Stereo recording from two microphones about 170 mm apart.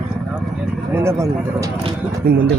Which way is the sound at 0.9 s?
15° right (ahead or behind).